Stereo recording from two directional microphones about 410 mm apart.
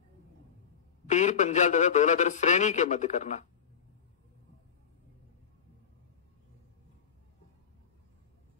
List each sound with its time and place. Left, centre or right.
1.0 s a man's voice: centre